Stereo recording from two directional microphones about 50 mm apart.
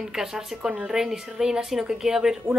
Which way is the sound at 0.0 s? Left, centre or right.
Centre.